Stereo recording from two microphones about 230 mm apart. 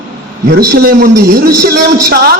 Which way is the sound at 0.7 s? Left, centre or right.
Right.